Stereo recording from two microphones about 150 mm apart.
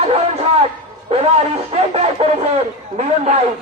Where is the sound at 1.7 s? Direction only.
40° right (ahead or behind).